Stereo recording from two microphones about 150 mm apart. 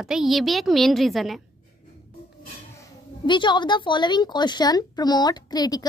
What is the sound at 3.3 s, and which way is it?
A woman's voice, 30° left (ahead or behind).